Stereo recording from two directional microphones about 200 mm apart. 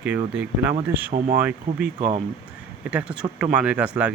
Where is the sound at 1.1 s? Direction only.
45° right (ahead or behind).